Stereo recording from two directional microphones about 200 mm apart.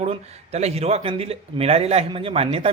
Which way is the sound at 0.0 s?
30° right (ahead or behind).